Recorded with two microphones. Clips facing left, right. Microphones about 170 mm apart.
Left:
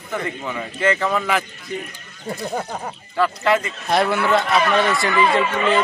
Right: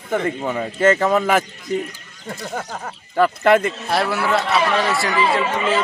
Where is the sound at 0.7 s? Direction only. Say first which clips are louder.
Right 4 dB; 45° right (ahead or behind).